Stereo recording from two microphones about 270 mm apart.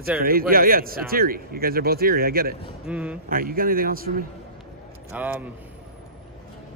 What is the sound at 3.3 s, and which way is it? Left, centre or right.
Speech, right.